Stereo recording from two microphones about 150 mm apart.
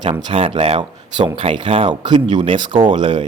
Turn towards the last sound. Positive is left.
turn(degrees=-35)  # may be behind; listen again after turning